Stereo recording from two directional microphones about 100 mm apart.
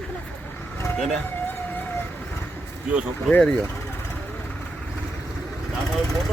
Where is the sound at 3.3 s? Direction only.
10° left (ahead or behind).